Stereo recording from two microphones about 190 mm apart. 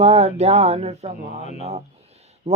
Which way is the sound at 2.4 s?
35° right (ahead or behind).